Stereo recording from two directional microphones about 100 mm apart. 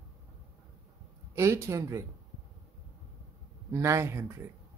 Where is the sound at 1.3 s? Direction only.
25° right (ahead or behind).